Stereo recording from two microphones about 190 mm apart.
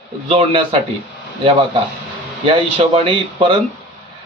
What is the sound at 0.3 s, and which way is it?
Speech, 30° right (ahead or behind).